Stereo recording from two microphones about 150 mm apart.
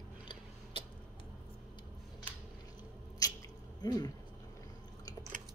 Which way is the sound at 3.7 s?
25° left (ahead or behind).